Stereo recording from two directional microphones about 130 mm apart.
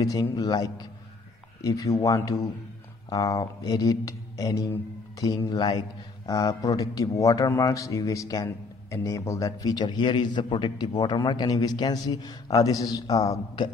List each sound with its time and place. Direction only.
0.0 s a man's voice: 30° left (ahead or behind)